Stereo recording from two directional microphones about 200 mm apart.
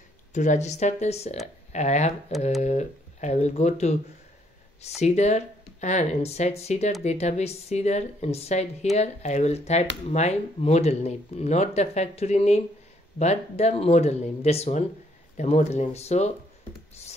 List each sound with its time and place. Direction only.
0.3 s speech: 35° left (ahead or behind)
5.0 s speech: 35° left (ahead or behind)